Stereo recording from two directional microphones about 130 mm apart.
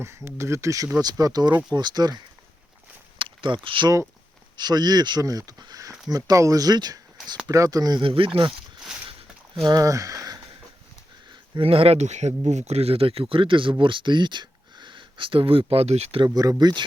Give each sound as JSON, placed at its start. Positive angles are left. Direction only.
{"t": 0.0, "sound": "speech", "side_deg": -20}
{"t": 8.0, "sound": "speech", "side_deg": -40}
{"t": 9.6, "sound": "speech", "side_deg": -25}
{"t": 11.5, "sound": "speech", "side_deg": -45}
{"t": 16.2, "sound": "speech", "side_deg": -30}